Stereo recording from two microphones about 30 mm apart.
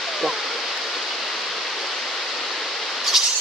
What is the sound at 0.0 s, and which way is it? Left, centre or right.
Waterfall, centre.